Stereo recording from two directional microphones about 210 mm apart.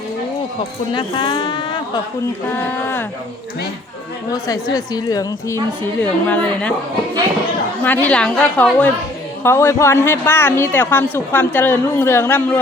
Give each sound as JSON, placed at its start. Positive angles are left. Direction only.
{"t": 0.9, "sound": "speech", "side_deg": 20}
{"t": 2.5, "sound": "speech", "side_deg": 10}
{"t": 4.3, "sound": "speech", "side_deg": 15}
{"t": 7.9, "sound": "a woman's voice", "side_deg": 5}